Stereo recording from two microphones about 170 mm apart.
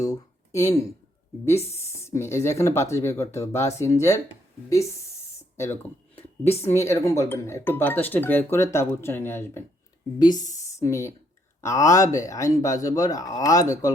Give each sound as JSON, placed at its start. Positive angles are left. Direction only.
{"t": 0.0, "sound": "speech", "side_deg": 20}
{"t": 5.5, "sound": "a woman's voice", "side_deg": 15}